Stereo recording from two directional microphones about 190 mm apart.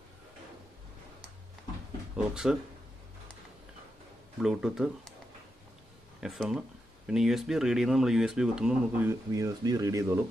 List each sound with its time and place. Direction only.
2.2 s speech: 5° right (ahead or behind)
4.4 s speech: 5° right (ahead or behind)
6.2 s speech: centre (ahead or behind)
9.3 s speech: 20° right (ahead or behind)